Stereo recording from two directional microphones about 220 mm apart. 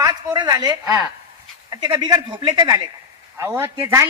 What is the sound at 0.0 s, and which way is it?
A man's voice, 20° right (ahead or behind).